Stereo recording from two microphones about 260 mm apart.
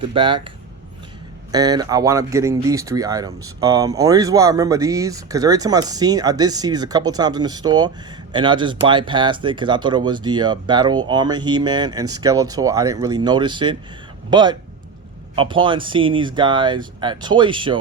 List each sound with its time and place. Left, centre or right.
0.1 s speech: centre
1.5 s speech: centre